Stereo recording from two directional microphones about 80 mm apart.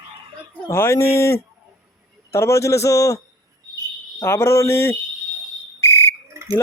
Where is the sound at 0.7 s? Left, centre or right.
Left.